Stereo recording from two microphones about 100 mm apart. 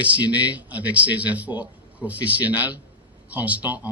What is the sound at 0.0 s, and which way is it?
A man's voice, 15° right (ahead or behind).